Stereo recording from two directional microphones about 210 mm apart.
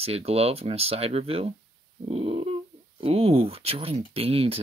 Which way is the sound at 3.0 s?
30° right (ahead or behind).